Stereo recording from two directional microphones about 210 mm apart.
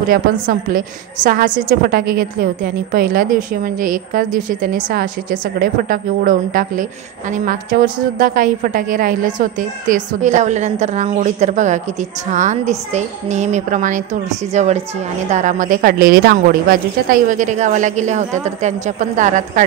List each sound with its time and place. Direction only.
0.1 s a woman's voice: 40° right (ahead or behind)